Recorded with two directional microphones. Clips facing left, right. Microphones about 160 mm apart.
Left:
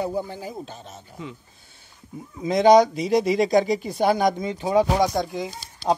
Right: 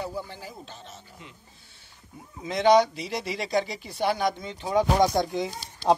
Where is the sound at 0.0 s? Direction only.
45° left (ahead or behind).